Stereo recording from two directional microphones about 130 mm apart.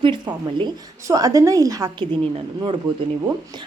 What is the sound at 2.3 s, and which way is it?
Speech, 45° right (ahead or behind).